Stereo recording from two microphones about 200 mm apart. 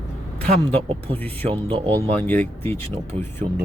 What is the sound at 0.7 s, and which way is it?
Speech, 25° right (ahead or behind).